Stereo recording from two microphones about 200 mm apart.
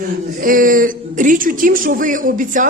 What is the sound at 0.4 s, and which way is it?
A man's voice, 45° right (ahead or behind).